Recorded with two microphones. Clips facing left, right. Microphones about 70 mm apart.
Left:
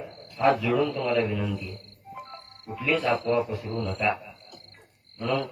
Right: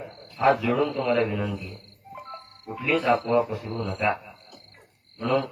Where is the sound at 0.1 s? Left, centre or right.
Right.